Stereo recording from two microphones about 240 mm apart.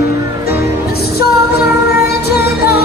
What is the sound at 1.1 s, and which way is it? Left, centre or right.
Music, left.